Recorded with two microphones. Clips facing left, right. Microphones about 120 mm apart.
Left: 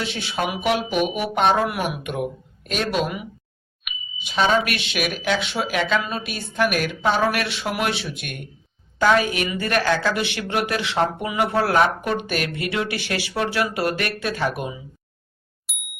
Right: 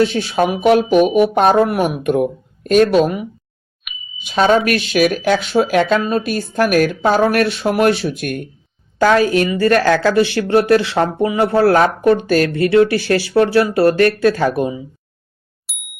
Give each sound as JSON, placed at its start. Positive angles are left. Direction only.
{"t": 0.0, "sound": "speech", "side_deg": -40}
{"t": 1.0, "sound": "music", "side_deg": 0}
{"t": 1.3, "sound": "speech", "side_deg": -40}
{"t": 3.8, "sound": "a sound", "side_deg": 0}
{"t": 4.4, "sound": "speech", "side_deg": -50}
{"t": 15.7, "sound": "bicycle bell", "side_deg": 0}